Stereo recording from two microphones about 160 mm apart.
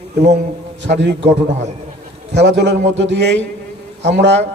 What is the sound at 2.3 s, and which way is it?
A man's voice, 90° right.